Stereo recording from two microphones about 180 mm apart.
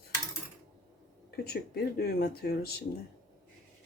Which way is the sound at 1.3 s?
60° left (ahead or behind).